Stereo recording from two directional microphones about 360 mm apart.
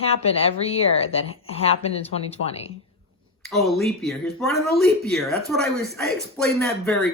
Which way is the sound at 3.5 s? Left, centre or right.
Centre.